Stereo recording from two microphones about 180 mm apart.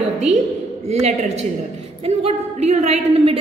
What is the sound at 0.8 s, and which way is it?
A woman's voice, 35° right (ahead or behind).